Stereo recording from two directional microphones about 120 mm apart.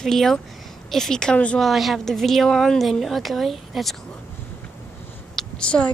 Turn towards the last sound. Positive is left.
turn(degrees=10)  # may be behind; listen again after turning